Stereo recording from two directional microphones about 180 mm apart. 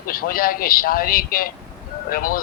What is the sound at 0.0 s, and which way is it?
A man's voice, 55° left (ahead or behind).